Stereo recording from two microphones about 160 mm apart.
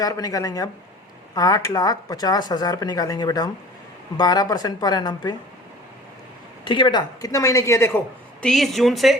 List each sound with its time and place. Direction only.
0.0 s speech: 20° left (ahead or behind)
6.7 s speech: 30° left (ahead or behind)
8.4 s a woman's voice: centre (ahead or behind)